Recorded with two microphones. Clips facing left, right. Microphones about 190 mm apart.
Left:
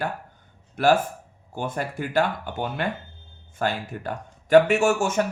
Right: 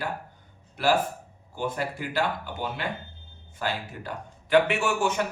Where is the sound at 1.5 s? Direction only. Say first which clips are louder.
Left 1 dB; 50° left (ahead or behind).